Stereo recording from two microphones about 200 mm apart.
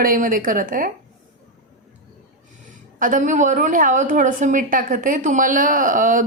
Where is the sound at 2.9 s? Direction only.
40° right (ahead or behind).